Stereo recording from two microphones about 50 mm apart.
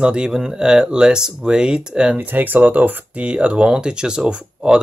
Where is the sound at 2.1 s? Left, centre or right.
Right.